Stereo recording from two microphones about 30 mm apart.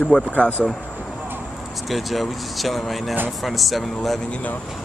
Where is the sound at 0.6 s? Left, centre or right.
Left.